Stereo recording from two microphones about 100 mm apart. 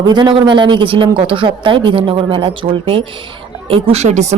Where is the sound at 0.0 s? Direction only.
45° right (ahead or behind); by 4.4 s 90° right.